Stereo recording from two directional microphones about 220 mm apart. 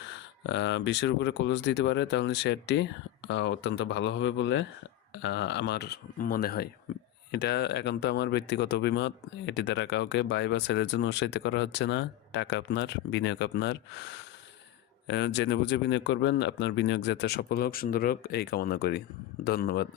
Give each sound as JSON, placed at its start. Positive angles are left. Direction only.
{"t": 0.4, "sound": "speech", "side_deg": 55}
{"t": 15.0, "sound": "speech", "side_deg": 55}